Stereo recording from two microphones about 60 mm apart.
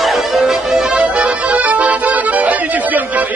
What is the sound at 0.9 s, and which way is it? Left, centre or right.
Accordion, right.